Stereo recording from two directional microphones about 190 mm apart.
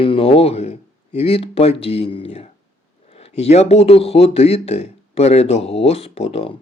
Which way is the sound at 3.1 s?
35° left (ahead or behind).